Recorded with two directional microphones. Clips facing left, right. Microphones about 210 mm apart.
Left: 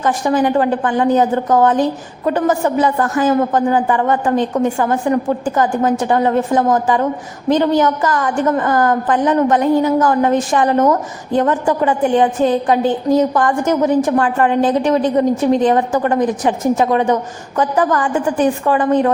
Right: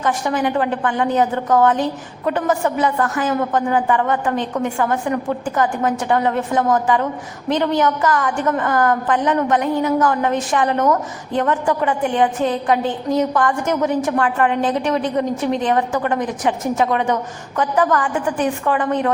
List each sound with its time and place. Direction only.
0.0 s a woman's voice: 35° left (ahead or behind)